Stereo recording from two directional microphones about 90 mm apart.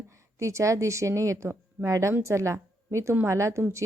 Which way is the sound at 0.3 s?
35° right (ahead or behind).